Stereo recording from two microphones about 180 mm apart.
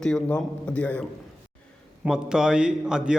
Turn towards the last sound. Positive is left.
turn(degrees=-5)  # may be behind; listen again after turning